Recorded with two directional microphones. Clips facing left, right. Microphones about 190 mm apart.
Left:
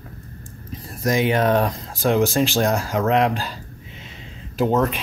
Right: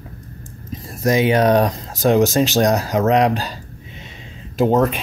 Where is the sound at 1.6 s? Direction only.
40° right (ahead or behind).